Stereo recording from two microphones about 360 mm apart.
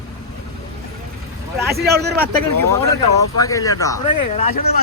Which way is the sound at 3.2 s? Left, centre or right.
Centre.